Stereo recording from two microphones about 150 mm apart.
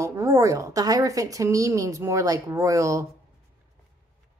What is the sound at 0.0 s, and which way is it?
A woman's voice, 20° right (ahead or behind).